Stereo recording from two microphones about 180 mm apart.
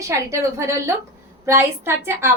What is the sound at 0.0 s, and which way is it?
A woman's voice, 15° right (ahead or behind).